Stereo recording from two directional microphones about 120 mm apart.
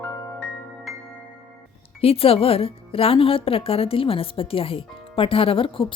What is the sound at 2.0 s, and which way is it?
Speech, 55° left (ahead or behind).